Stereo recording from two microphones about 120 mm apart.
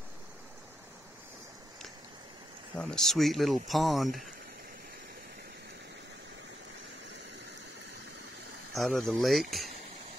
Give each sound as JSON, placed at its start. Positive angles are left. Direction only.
{"t": 2.8, "sound": "speech", "side_deg": 5}
{"t": 8.7, "sound": "speech", "side_deg": 0}